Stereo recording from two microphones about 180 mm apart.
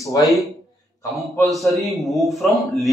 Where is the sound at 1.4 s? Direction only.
Centre (ahead or behind).